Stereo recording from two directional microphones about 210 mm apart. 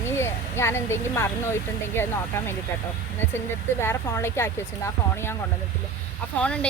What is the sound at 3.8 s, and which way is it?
Speech, 10° left (ahead or behind).